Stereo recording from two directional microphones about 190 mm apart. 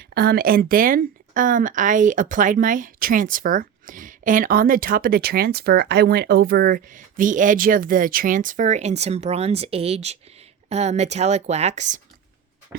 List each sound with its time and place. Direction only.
0.0 s a woman's voice: 55° right (ahead or behind); by 11.9 s 40° right (ahead or behind)